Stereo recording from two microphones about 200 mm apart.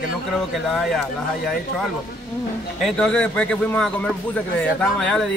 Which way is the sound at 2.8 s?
5° left (ahead or behind).